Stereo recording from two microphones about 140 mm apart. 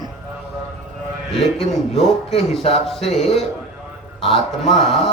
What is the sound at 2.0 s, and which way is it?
Speech, 45° left (ahead or behind).